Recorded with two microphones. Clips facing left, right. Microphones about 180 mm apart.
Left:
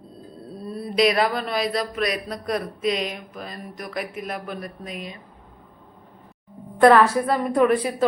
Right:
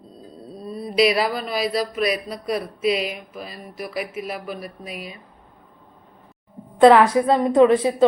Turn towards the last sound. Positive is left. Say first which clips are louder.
# right 4 dB
turn(degrees=-25)  # may be behind; listen again after turning